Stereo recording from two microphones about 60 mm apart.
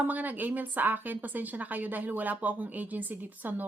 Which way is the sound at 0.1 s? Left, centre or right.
Right.